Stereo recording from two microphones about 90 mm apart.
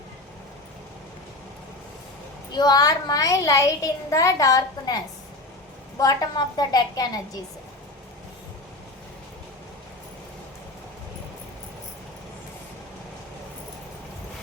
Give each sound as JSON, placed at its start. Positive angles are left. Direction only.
{"t": 2.6, "sound": "a child's voice", "side_deg": 50}